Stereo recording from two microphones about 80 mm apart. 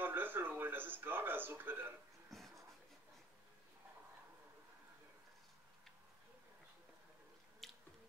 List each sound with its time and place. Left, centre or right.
0.0 s a sound: right
2.3 s writing: centre
7.6 s squish: centre